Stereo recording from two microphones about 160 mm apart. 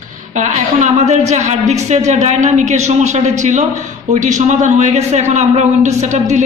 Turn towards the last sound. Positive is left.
turn(degrees=-45)  # may be behind; listen again after turning